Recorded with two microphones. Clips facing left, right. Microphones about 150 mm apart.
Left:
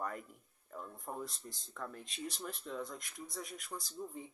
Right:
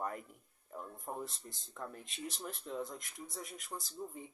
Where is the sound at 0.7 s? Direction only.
20° right (ahead or behind).